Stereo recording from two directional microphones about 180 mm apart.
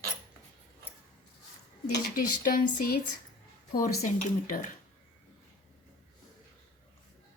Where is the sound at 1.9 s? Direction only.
50° left (ahead or behind).